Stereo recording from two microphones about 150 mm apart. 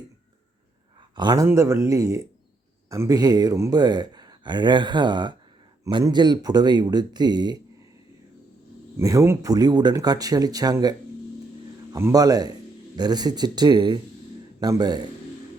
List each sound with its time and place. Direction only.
1.1 s speech: 30° right (ahead or behind)
9.0 s speech: 20° right (ahead or behind)